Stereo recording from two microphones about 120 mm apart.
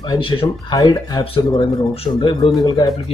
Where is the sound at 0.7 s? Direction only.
35° left (ahead or behind).